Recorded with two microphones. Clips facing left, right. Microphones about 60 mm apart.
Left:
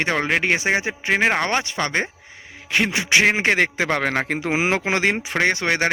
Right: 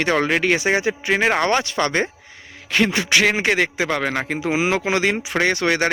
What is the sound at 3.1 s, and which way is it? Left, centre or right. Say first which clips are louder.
A man's voice: left 3 dB; left.